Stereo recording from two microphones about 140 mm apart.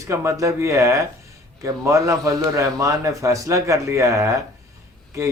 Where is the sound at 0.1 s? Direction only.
20° right (ahead or behind).